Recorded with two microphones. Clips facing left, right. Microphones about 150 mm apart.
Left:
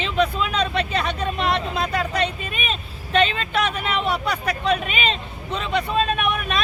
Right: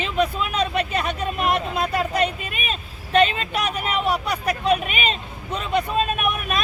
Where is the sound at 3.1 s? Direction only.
40° right (ahead or behind).